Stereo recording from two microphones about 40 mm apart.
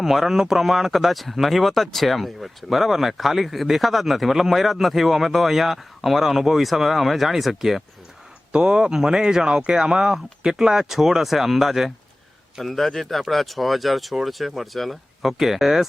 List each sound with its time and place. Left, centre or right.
0.0 s speech: centre
8.5 s speech: right; by 11.9 s centre
12.6 s speech: centre